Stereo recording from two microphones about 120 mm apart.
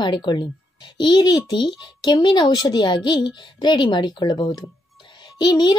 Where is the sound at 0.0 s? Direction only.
40° left (ahead or behind).